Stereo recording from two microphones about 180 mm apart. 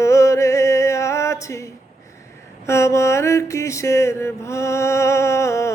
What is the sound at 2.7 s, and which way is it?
Mantra, 15° left (ahead or behind).